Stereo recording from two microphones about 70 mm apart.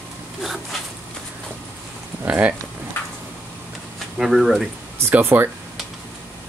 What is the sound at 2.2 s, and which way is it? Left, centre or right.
Speech, right.